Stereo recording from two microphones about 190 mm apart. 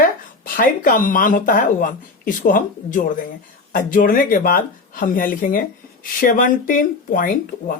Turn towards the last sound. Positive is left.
turn(degrees=45)  # may be behind; listen again after turning